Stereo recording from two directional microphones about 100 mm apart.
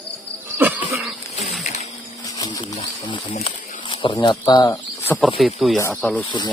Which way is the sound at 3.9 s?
60° left (ahead or behind).